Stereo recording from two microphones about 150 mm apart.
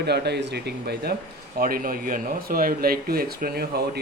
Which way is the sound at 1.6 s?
75° right (ahead or behind).